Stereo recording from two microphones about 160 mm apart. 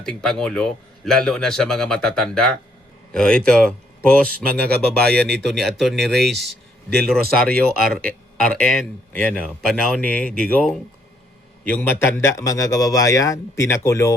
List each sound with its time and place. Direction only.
0.0 s a man's voice: 5° left (ahead or behind)